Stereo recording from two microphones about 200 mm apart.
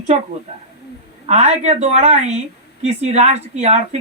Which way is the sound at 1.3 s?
35° right (ahead or behind).